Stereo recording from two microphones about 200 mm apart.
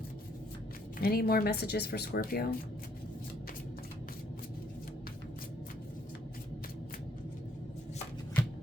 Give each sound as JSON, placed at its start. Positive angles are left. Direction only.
{"t": 1.0, "sound": "speech", "side_deg": 50}